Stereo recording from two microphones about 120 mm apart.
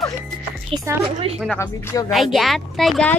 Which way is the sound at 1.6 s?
25° left (ahead or behind).